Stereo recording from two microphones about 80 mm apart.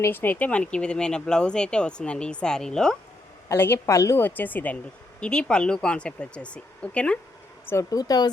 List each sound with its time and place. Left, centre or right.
0.0 s speech: left; by 3.0 s centre
3.5 s a woman's voice: left
4.2 s speech: left
7.7 s speech: left